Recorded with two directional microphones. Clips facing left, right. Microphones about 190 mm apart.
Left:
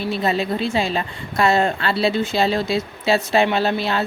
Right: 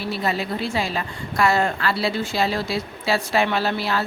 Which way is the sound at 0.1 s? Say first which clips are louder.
Left 3 dB; 25° left (ahead or behind).